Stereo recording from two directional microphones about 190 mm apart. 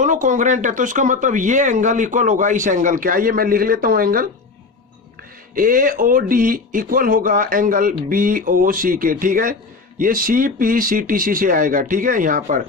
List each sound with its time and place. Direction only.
0.0 s speech: 40° right (ahead or behind)
5.5 s speech: 45° right (ahead or behind)